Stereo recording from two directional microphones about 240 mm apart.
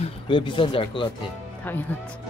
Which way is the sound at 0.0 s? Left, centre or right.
Left.